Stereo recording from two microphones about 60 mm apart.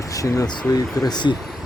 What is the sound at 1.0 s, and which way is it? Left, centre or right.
Speech, left.